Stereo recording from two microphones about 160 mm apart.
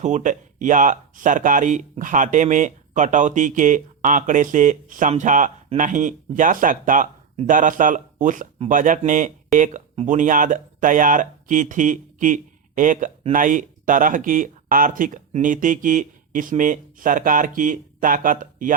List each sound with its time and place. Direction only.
0.0 s speech: 50° right (ahead or behind)